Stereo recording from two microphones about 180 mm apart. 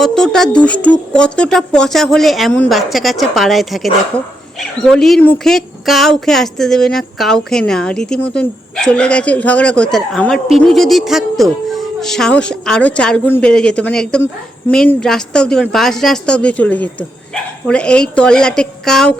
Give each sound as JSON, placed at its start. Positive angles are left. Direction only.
{"t": 0.0, "sound": "speech", "side_deg": 0}
{"t": 4.9, "sound": "speech", "side_deg": 0}